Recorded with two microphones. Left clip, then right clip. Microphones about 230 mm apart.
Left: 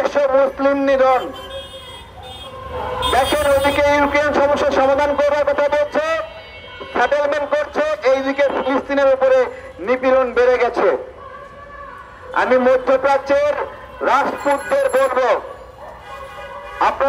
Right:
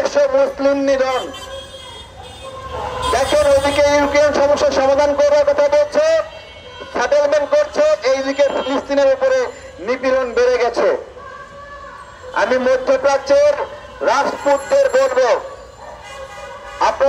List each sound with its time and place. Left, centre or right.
0.0 s a man's voice: left
3.1 s a man's voice: left
12.4 s a man's voice: left
16.8 s music: left